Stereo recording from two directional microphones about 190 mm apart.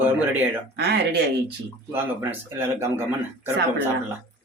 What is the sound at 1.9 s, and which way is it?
Speech, 10° right (ahead or behind).